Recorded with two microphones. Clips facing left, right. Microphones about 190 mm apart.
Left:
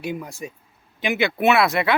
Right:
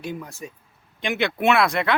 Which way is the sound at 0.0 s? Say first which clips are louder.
Left 3 dB; 10° left (ahead or behind).